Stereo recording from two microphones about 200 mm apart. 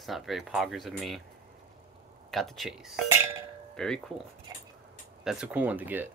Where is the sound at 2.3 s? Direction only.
Centre (ahead or behind).